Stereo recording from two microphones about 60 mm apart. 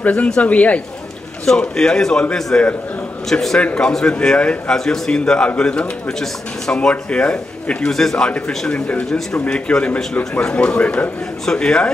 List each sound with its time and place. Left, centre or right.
0.0 s speech: left
1.4 s speech: centre
2.5 s speech: left
3.3 s speech: centre
7.9 s speech: centre